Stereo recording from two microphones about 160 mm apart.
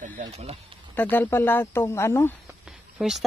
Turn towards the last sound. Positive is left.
turn(degrees=0)  # may be behind; listen again after turning